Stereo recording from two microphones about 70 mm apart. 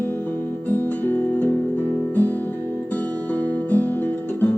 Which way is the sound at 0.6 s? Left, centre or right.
Left.